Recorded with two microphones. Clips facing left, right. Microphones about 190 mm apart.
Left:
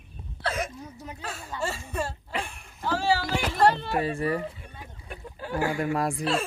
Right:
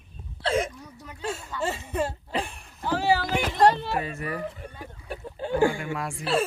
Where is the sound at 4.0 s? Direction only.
30° left (ahead or behind).